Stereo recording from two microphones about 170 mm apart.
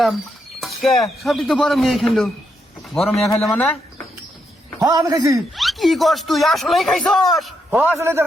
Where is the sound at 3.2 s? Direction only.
Centre (ahead or behind).